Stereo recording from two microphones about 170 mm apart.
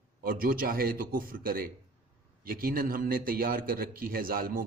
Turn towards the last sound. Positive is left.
turn(degrees=-55)  # may be behind; listen again after turning